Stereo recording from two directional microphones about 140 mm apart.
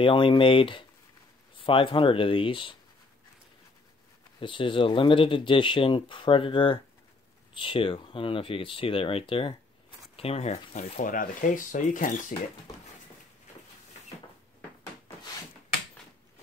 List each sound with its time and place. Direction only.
0.0 s speech: 35° left (ahead or behind)
4.4 s speech: 35° left (ahead or behind); by 12.4 s 65° left (ahead or behind)